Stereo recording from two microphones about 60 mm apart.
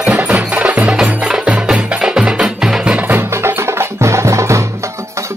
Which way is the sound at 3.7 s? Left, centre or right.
Right.